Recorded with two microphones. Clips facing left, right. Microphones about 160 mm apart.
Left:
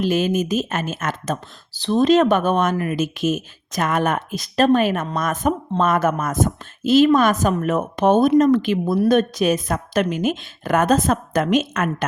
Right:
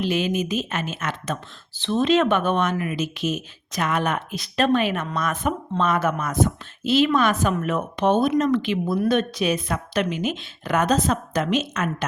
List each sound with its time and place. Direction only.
0.0 s speech: 45° left (ahead or behind)
8.3 s speech: 30° left (ahead or behind)
8.5 s speech: 45° left (ahead or behind)